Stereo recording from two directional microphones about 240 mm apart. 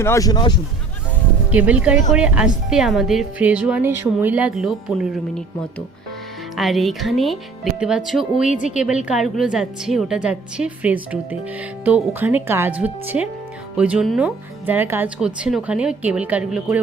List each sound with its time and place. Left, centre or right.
0.0 s speech: centre
1.5 s speech: centre
6.6 s speech: centre